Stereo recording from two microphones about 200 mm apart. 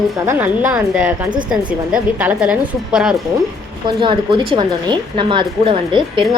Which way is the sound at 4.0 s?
25° right (ahead or behind).